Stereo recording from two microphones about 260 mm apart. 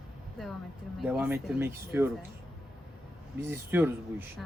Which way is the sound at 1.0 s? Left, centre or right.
Centre.